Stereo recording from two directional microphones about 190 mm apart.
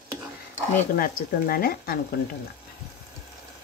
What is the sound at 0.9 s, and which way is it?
Speech, 50° left (ahead or behind).